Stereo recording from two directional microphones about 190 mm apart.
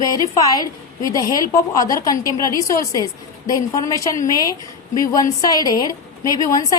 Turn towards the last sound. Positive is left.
turn(degrees=20)  # may be behind; listen again after turning